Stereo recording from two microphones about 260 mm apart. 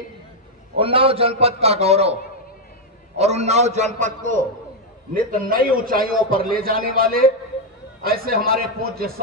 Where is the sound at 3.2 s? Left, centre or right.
Right.